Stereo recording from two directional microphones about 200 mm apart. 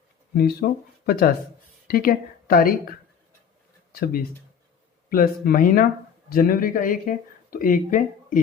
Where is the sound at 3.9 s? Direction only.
45° left (ahead or behind).